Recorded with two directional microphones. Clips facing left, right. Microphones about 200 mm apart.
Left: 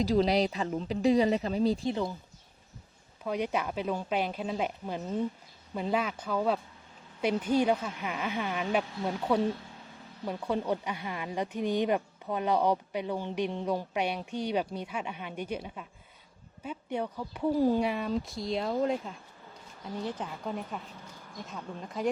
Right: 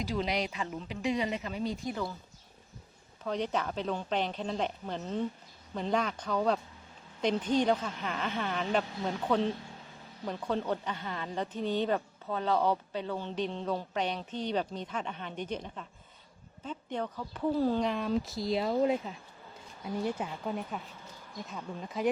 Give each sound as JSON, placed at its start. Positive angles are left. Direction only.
{"t": 0.0, "sound": "speech", "side_deg": 35}
{"t": 3.2, "sound": "speech", "side_deg": 10}